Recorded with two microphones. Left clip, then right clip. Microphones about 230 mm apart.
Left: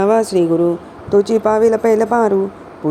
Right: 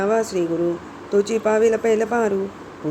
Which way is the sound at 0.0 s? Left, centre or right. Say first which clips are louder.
Left 7 dB; left.